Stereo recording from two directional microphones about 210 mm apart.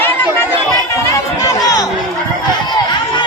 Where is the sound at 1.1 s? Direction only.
15° left (ahead or behind).